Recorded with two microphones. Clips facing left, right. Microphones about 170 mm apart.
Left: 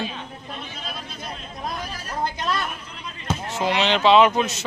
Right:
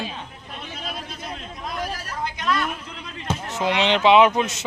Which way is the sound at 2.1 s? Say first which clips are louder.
Left 1 dB; 30° left (ahead or behind).